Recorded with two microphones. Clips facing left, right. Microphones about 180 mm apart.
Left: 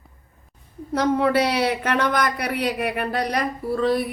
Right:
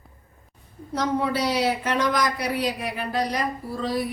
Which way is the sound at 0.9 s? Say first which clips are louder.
Left 5 dB; 65° left (ahead or behind).